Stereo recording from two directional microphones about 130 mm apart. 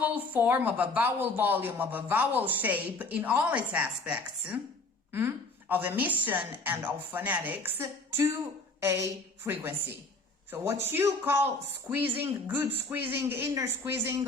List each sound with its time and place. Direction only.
0.0 s a woman's voice: 15° right (ahead or behind)